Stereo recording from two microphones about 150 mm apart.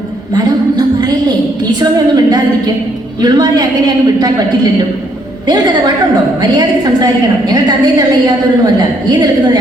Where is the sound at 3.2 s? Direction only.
25° right (ahead or behind).